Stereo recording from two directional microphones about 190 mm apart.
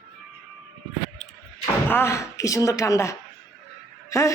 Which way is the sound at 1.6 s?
10° left (ahead or behind).